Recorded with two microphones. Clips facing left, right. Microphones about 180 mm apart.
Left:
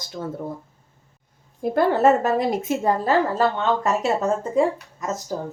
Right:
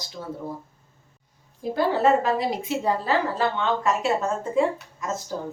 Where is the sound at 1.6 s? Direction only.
55° left (ahead or behind).